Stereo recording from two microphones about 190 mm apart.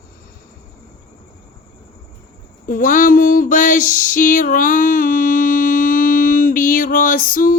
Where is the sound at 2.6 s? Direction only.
45° left (ahead or behind).